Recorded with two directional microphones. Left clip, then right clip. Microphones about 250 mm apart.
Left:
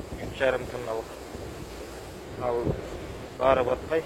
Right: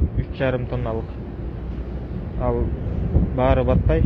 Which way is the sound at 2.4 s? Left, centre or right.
Centre.